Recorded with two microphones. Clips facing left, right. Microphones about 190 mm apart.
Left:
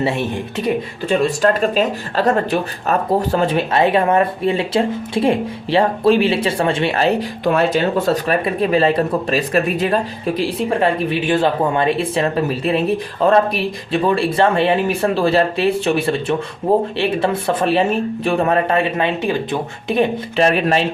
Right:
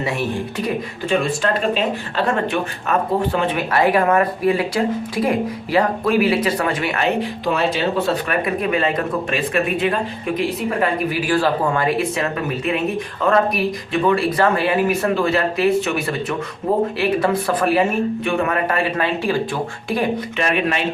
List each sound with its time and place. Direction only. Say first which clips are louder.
1.4 s speech: left 4 dB; 40° left (ahead or behind)
3.7 s speech: right 1 dB; 25° left (ahead or behind)
7.5 s speech: left 3 dB; 50° left (ahead or behind); by 20.5 s 25° left (ahead or behind)
20.5 s speech: left 4 dB; 35° left (ahead or behind)